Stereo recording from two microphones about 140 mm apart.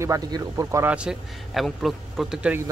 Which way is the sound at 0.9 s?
5° right (ahead or behind).